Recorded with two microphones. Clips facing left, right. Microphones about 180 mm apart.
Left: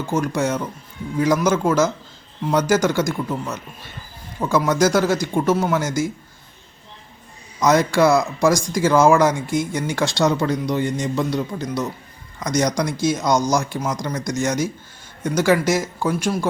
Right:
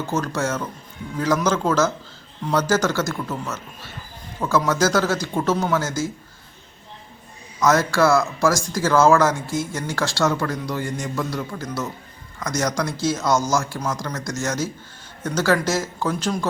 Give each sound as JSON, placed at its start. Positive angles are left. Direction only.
{"t": 0.0, "sound": "speech", "side_deg": 10}
{"t": 7.6, "sound": "speech", "side_deg": 15}